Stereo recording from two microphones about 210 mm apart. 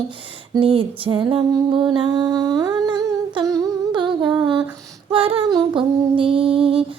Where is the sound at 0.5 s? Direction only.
25° right (ahead or behind).